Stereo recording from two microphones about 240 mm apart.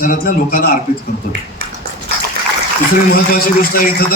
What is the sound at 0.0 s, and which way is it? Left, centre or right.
Speech, left.